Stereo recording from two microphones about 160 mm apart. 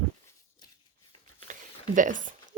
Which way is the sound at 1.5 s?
55° right (ahead or behind).